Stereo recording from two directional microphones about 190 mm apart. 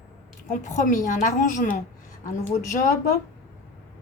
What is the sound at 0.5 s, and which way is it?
A woman's voice, 40° left (ahead or behind).